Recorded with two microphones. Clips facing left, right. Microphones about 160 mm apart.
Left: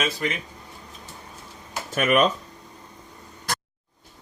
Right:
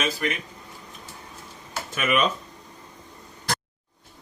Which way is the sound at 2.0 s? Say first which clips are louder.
Left 4 dB; 45° left (ahead or behind).